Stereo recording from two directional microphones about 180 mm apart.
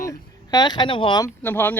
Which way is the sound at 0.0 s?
20° left (ahead or behind).